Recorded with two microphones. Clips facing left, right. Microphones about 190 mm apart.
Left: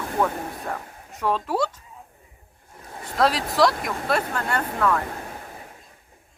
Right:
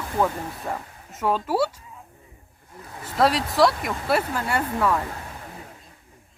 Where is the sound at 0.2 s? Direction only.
Centre (ahead or behind).